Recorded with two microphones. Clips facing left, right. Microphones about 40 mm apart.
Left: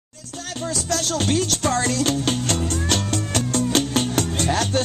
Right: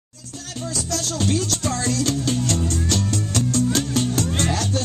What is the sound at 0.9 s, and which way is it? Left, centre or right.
Music, left.